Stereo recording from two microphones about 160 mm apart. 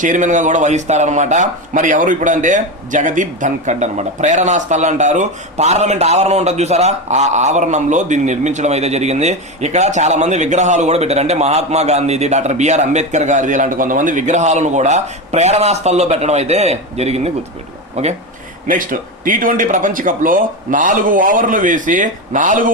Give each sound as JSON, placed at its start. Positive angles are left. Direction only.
{"t": 0.0, "sound": "speech", "side_deg": -50}
{"t": 18.7, "sound": "speech", "side_deg": -60}